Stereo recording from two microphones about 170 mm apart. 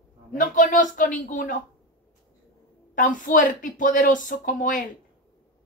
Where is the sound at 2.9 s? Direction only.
50° left (ahead or behind).